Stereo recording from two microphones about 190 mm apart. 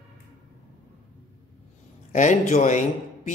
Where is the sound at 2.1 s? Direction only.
40° left (ahead or behind).